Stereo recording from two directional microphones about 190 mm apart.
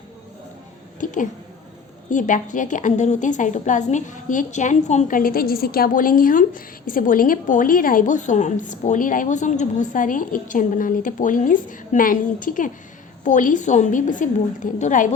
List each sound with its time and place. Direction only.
0.9 s a woman's voice: 40° left (ahead or behind)